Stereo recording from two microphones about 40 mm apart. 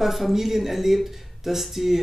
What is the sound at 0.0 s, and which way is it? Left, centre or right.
Speech, centre.